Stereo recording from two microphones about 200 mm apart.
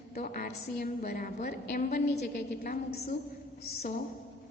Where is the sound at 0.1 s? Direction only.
45° left (ahead or behind).